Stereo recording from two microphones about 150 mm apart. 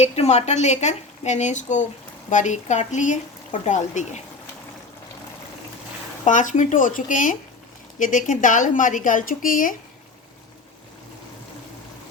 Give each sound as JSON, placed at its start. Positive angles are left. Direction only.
{"t": 0.0, "sound": "speech", "side_deg": 45}
{"t": 6.2, "sound": "a woman's voice", "side_deg": 55}